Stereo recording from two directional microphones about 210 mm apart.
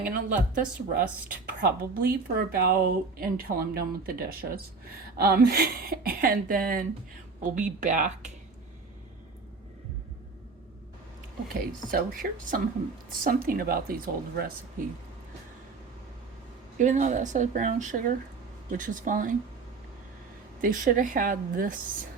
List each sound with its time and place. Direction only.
0.0 s speech: 40° right (ahead or behind)
11.5 s speech: 45° right (ahead or behind)
16.7 s speech: 35° right (ahead or behind)
20.6 s speech: 40° right (ahead or behind)